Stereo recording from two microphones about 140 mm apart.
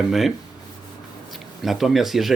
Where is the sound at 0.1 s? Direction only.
Centre (ahead or behind).